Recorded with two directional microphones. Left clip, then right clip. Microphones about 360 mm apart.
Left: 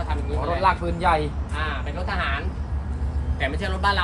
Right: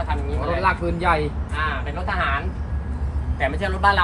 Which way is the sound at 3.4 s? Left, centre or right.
Centre.